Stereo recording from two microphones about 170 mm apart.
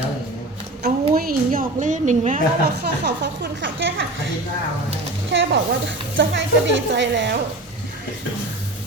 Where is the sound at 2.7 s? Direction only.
85° right.